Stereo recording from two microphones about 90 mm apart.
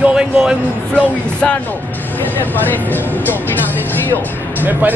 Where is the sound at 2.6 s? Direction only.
20° left (ahead or behind).